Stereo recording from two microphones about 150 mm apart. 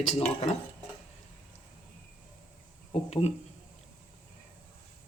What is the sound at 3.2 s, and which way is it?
Speech, 45° left (ahead or behind).